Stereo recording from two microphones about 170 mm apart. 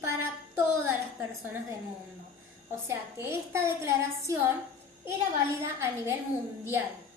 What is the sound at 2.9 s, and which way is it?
A woman's voice, 15° right (ahead or behind).